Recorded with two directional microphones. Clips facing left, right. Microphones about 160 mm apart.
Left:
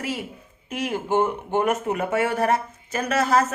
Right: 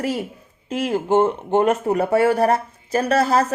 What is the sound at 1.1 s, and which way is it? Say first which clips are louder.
Speech: right 5 dB; 25° right (ahead or behind).